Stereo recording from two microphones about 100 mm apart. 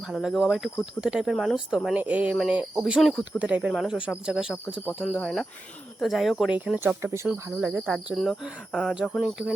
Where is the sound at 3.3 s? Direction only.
15° right (ahead or behind).